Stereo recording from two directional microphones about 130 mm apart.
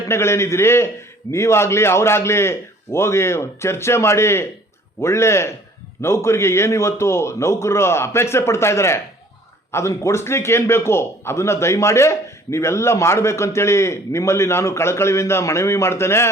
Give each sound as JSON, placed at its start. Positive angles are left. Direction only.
{"t": 0.1, "sound": "a man's voice", "side_deg": 20}